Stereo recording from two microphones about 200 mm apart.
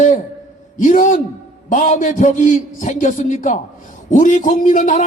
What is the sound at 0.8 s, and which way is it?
A man's voice, 40° left (ahead or behind).